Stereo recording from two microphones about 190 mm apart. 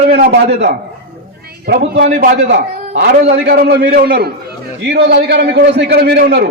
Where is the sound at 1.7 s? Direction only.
55° right (ahead or behind).